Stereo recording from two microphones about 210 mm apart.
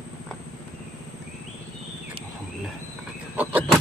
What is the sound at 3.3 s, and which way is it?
Vehicle, 5° right (ahead or behind).